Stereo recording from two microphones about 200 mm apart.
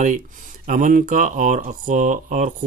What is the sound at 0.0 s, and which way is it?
Speech, 40° right (ahead or behind).